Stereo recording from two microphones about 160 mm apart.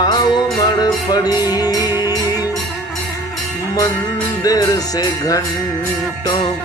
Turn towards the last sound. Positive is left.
turn(degrees=20)  # may be behind; listen again after turning